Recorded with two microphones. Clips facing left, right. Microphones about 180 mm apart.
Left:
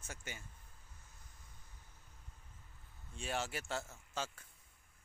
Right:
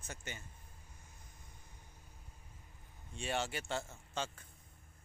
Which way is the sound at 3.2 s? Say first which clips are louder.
Right 2 dB; centre (ahead or behind).